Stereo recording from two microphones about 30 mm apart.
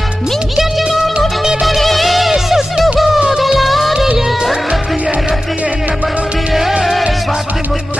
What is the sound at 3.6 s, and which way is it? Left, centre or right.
Music of bollywood, centre.